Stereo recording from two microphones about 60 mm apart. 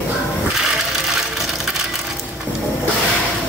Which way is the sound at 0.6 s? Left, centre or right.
Centre.